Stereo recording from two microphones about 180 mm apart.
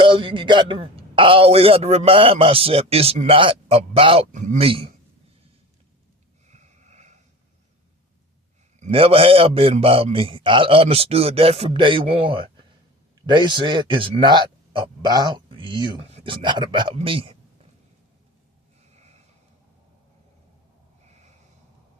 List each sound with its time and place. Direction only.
0.0 s a man's voice: 30° right (ahead or behind)
4.3 s a man's voice: 40° right (ahead or behind)
6.5 s snort: 40° right (ahead or behind)
8.8 s a man's voice: 30° right (ahead or behind)
18.9 s a sound: 40° right (ahead or behind)
21.0 s snort: 40° right (ahead or behind)